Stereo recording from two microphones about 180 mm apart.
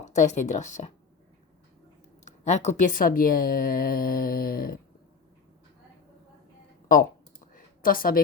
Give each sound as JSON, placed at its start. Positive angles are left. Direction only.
{"t": 0.0, "sound": "speech", "side_deg": 40}
{"t": 2.2, "sound": "speech", "side_deg": 40}
{"t": 6.8, "sound": "speech", "side_deg": 50}
{"t": 7.5, "sound": "a sound", "side_deg": 50}